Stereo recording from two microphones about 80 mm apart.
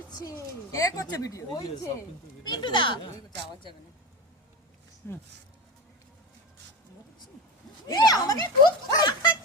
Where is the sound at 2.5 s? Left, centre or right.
Left.